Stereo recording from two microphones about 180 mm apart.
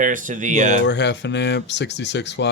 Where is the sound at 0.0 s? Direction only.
45° right (ahead or behind).